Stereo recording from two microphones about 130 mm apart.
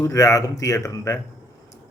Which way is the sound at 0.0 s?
25° left (ahead or behind).